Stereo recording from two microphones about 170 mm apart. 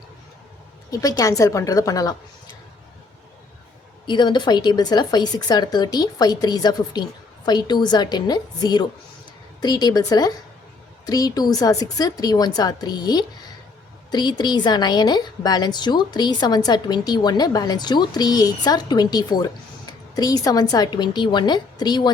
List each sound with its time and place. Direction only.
0.9 s a woman's voice: 20° left (ahead or behind)
4.0 s a woman's voice: 25° left (ahead or behind)